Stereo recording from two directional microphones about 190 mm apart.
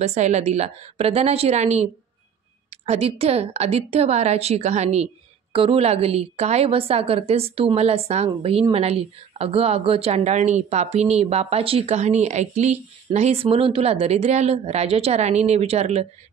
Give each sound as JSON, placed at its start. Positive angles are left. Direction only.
{"t": 0.0, "sound": "a woman's voice", "side_deg": -35}